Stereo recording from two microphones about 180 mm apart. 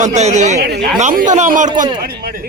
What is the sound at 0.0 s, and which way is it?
Speech, 40° right (ahead or behind).